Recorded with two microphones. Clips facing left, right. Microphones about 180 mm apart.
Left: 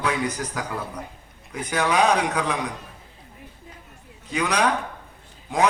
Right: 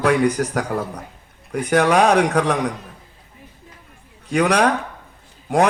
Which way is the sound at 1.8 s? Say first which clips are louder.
Right 5 dB; 45° right (ahead or behind).